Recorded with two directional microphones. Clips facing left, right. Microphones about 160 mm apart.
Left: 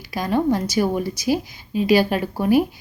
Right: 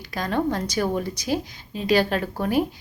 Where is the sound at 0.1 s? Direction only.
10° left (ahead or behind).